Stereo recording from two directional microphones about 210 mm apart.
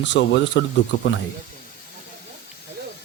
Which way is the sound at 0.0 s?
55° left (ahead or behind).